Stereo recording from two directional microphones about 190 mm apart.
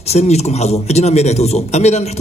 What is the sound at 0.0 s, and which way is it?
Speech, 35° left (ahead or behind).